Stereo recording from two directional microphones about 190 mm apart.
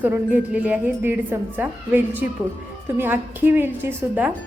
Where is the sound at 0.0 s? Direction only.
10° right (ahead or behind).